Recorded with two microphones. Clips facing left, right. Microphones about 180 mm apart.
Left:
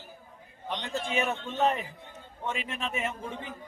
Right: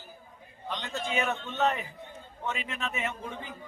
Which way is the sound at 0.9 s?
30° left (ahead or behind).